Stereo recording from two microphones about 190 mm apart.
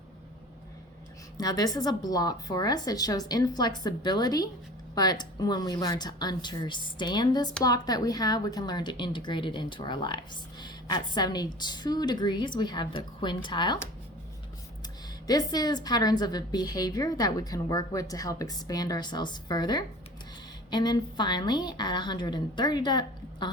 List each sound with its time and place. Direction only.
1.4 s a woman's voice: 20° left (ahead or behind)
15.3 s a woman's voice: 20° left (ahead or behind)